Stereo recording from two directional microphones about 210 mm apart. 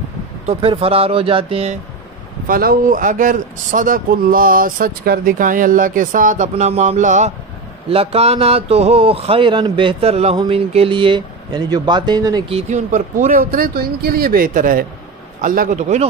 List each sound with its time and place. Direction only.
0.5 s speech: 25° right (ahead or behind)
2.4 s speech: 45° right (ahead or behind)